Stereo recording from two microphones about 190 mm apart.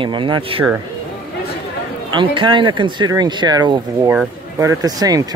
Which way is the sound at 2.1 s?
25° right (ahead or behind).